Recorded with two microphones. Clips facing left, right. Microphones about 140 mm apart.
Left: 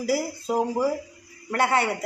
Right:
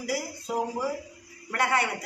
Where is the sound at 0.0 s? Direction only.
30° left (ahead or behind).